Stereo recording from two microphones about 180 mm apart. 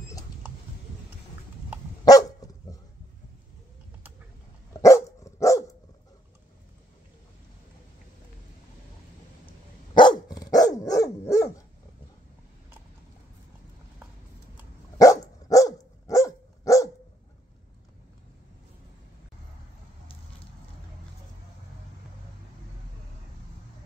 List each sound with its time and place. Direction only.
2.0 s dog: 20° left (ahead or behind)
4.7 s dog: 15° left (ahead or behind)
9.9 s dog: 25° left (ahead or behind)
15.0 s dog: 20° left (ahead or behind)